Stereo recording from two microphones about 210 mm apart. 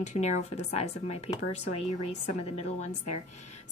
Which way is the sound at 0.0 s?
35° left (ahead or behind).